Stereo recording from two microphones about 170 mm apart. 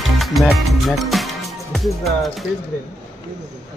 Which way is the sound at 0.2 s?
Centre (ahead or behind).